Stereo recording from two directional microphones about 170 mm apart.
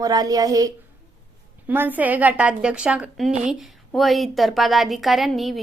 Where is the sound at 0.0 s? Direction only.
20° right (ahead or behind).